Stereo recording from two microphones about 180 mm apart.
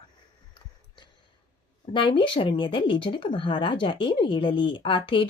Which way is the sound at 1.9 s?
30° left (ahead or behind).